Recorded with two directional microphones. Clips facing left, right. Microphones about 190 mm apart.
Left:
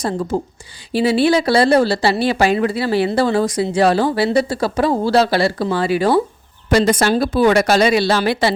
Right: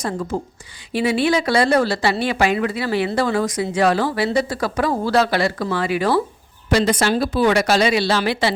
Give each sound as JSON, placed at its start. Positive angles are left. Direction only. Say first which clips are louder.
{"t": 0.0, "sound": "speech", "louder": "left 4 dB", "side_deg": 30}
{"t": 6.7, "sound": "speech", "louder": "left 3 dB", "side_deg": 45}